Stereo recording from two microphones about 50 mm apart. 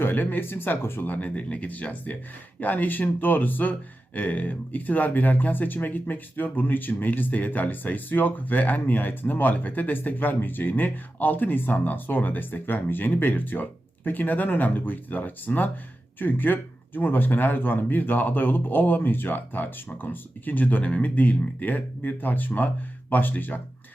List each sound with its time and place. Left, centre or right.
0.0 s speech: left